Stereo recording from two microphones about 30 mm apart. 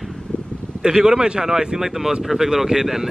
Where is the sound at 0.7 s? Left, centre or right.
Right.